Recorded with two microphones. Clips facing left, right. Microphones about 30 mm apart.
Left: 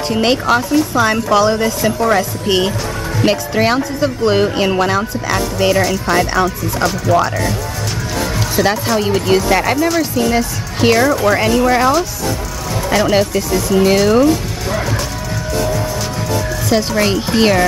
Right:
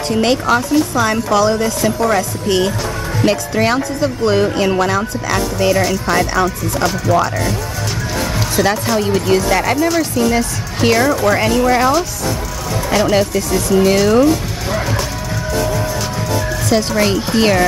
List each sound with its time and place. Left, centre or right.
0.1 s a woman's voice: centre
8.5 s speech: centre
16.2 s speech: centre